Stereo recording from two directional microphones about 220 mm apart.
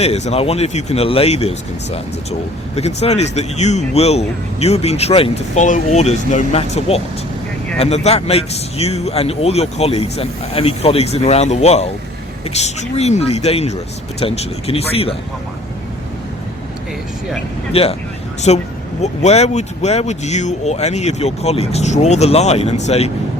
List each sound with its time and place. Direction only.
0.0 s speech: 30° left (ahead or behind)
17.7 s speech: 25° left (ahead or behind)